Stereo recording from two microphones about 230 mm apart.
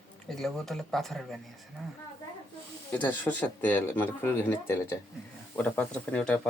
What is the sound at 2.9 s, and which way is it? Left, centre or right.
Speech, centre.